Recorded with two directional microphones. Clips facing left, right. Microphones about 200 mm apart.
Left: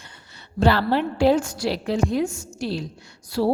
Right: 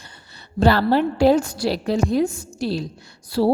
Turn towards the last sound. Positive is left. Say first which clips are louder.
# right 3 dB
turn(degrees=-30)  # may be behind; listen again after turning